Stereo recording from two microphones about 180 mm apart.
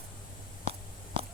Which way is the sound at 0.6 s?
30° right (ahead or behind).